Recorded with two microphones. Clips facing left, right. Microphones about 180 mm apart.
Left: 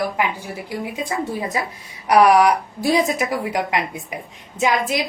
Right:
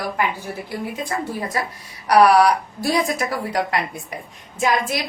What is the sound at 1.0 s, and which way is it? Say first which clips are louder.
A woman's voice: left 2 dB; 15° left (ahead or behind).